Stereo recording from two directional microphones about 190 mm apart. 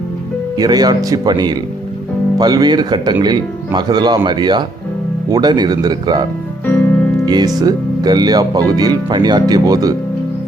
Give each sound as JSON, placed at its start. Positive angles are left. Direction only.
{"t": 0.5, "sound": "speech", "side_deg": -20}
{"t": 6.7, "sound": "music", "side_deg": 10}
{"t": 7.3, "sound": "speech", "side_deg": -20}